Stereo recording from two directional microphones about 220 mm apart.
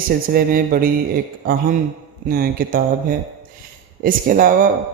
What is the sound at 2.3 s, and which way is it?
Speech, 40° right (ahead or behind).